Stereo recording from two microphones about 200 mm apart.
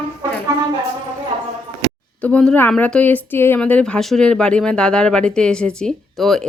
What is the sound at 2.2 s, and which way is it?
Speech, 5° left (ahead or behind).